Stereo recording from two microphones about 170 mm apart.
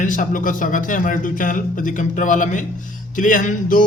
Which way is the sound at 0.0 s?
50° left (ahead or behind).